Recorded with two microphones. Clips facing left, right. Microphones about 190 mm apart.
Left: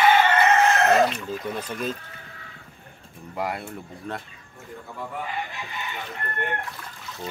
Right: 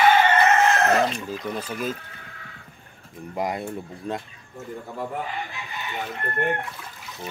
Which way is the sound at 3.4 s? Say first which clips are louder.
Right 2 dB; 15° right (ahead or behind).